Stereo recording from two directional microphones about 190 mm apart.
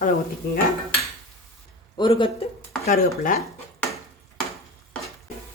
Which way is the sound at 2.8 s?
50° left (ahead or behind).